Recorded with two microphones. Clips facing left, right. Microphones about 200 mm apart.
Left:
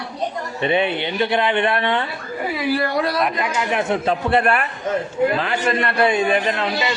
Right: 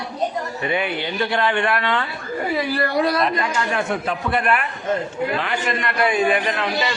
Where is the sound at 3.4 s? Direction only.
20° left (ahead or behind).